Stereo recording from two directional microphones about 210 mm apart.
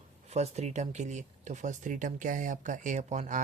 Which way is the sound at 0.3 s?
30° right (ahead or behind).